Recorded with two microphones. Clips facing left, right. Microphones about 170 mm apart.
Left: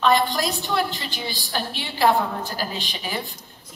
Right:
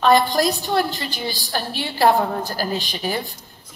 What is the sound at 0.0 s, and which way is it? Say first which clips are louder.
A woman's voice: right 4 dB; 40° right (ahead or behind).